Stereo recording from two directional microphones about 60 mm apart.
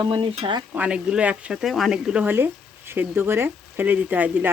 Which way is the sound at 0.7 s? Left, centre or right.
Right.